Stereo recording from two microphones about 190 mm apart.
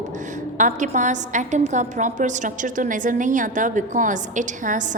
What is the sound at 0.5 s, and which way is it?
A woman's voice, 40° right (ahead or behind).